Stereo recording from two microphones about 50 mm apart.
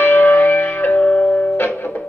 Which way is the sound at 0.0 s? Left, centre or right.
Left.